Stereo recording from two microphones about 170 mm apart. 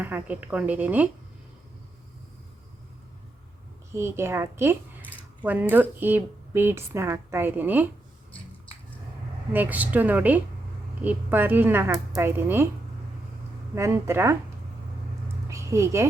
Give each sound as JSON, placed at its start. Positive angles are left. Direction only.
{"t": 0.0, "sound": "a woman's voice", "side_deg": -10}
{"t": 3.9, "sound": "speech", "side_deg": -15}
{"t": 9.5, "sound": "a woman's voice", "side_deg": -10}
{"t": 13.7, "sound": "a woman's voice", "side_deg": -15}
{"t": 15.4, "sound": "a sound", "side_deg": -15}